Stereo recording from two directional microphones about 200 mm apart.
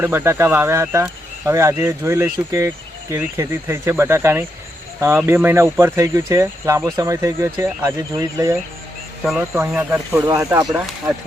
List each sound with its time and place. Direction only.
0.0 s speech: 10° right (ahead or behind)